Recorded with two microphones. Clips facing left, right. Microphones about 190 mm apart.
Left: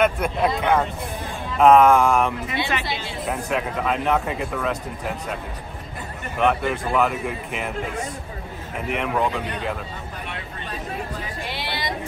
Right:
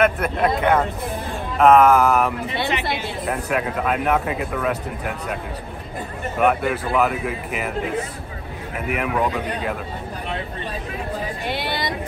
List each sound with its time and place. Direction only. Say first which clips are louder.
0.0 s speech: right 1 dB; centre (ahead or behind)
2.8 s speech: right 4 dB; 55° right (ahead or behind)
3.3 s speech: right 1 dB; 5° right (ahead or behind)
6.4 s speech: right 2 dB; 5° right (ahead or behind)
8.8 s speech: right 1 dB; 5° right (ahead or behind)
11.4 s vehicle: right 5 dB; 50° right (ahead or behind)